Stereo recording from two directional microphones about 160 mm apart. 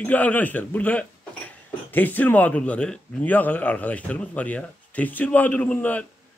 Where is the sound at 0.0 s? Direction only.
10° left (ahead or behind).